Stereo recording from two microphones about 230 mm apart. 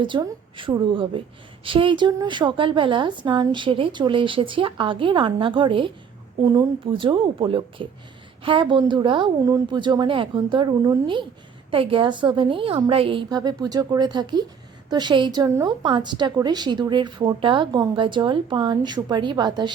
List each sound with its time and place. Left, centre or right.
0.0 s a woman's voice: right